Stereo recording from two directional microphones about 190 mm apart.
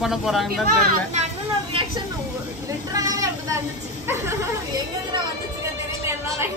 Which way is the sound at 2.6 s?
20° right (ahead or behind).